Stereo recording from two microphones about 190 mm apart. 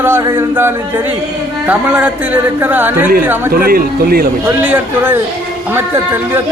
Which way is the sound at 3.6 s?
50° right (ahead or behind).